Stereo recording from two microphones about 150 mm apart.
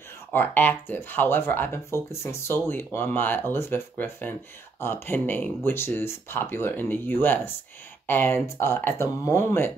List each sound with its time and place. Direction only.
0.3 s speech: 15° left (ahead or behind)